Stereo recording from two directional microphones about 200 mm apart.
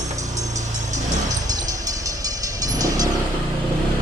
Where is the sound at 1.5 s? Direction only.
20° right (ahead or behind).